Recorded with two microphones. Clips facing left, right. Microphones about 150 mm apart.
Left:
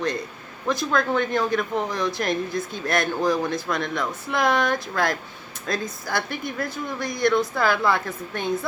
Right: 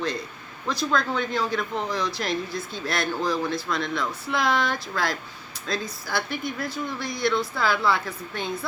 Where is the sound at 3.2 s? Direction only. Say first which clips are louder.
Left 3 dB; 20° left (ahead or behind).